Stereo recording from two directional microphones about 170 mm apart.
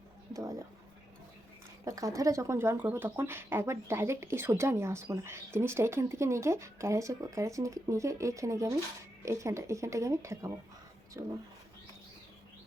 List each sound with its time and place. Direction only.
1.8 s speech: 20° right (ahead or behind)